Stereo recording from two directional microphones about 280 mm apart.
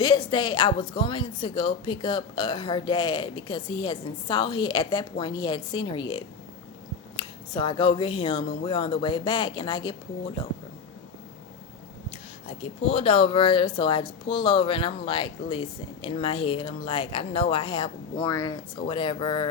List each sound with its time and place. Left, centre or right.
0.0 s speech: centre
12.5 s speech: left